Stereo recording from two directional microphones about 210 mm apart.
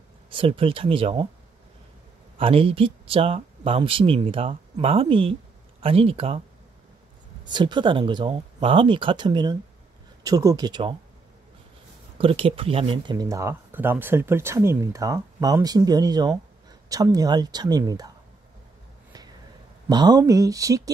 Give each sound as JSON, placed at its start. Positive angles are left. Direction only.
{"t": 0.3, "sound": "speech", "side_deg": -25}
{"t": 2.3, "sound": "speech", "side_deg": -25}
{"t": 7.4, "sound": "speech", "side_deg": -20}
{"t": 12.2, "sound": "speech", "side_deg": -25}
{"t": 19.9, "sound": "speech", "side_deg": -20}